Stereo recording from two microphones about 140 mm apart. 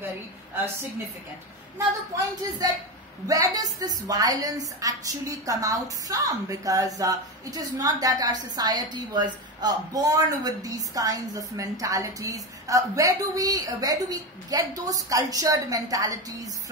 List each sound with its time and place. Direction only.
2.6 s a woman's voice: 30° right (ahead or behind)